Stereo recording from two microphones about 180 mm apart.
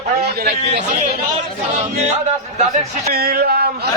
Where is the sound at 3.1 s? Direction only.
55° right (ahead or behind).